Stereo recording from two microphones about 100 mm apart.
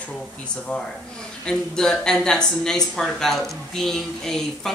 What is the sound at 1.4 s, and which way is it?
Speech, 5° left (ahead or behind).